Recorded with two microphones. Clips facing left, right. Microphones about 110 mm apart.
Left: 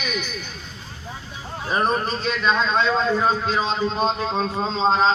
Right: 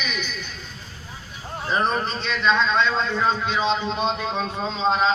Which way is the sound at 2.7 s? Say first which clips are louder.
Left 2 dB; 5° left (ahead or behind).